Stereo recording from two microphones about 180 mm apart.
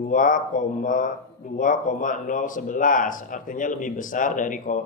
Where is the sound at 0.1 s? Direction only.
45° left (ahead or behind).